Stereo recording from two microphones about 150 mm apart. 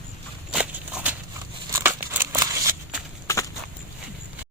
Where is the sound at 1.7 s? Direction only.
15° right (ahead or behind).